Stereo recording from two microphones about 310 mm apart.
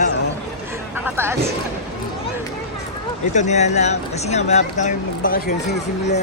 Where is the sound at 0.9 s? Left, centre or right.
Centre.